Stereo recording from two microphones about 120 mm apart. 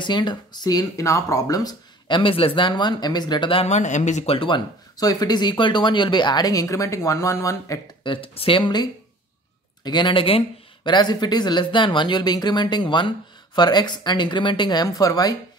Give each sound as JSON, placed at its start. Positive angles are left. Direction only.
{"t": 0.0, "sound": "speech", "side_deg": 40}
{"t": 3.6, "sound": "speech", "side_deg": 80}
{"t": 4.3, "sound": "speech", "side_deg": 40}
{"t": 8.0, "sound": "speech", "side_deg": 45}
{"t": 9.8, "sound": "speech", "side_deg": 40}